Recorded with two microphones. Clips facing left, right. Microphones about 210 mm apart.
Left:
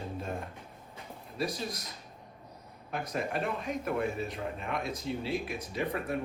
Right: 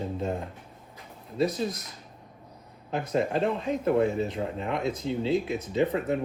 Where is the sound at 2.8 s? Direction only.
25° right (ahead or behind).